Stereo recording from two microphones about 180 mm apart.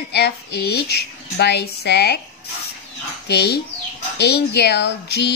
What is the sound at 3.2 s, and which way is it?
Speech, 65° left (ahead or behind).